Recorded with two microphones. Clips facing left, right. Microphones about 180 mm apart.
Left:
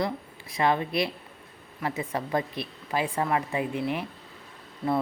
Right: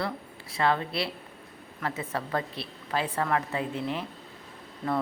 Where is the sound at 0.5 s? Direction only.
15° left (ahead or behind).